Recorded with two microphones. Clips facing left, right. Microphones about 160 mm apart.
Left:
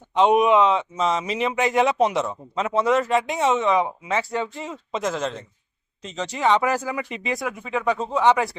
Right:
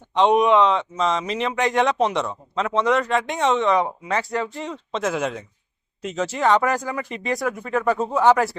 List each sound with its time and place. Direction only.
0.1 s speech: 5° left (ahead or behind)
5.1 s speech: 10° right (ahead or behind); by 7.0 s 10° left (ahead or behind)
7.0 s speech: 40° right (ahead or behind)
7.3 s speech: centre (ahead or behind)